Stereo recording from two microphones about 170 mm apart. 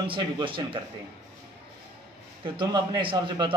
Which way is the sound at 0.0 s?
30° right (ahead or behind).